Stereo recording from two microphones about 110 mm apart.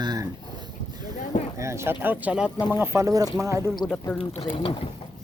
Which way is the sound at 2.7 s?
25° right (ahead or behind).